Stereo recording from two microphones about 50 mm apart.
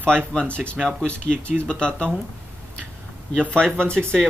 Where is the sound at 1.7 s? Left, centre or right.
Centre.